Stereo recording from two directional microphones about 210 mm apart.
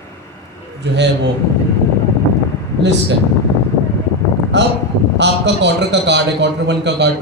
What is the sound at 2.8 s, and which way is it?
Speech, 55° right (ahead or behind).